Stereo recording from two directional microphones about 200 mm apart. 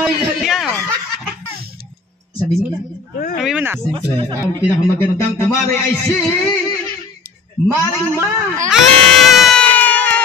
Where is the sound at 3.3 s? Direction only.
5° right (ahead or behind).